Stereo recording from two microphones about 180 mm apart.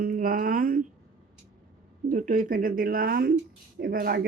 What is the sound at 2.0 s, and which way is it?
Speech, 45° right (ahead or behind).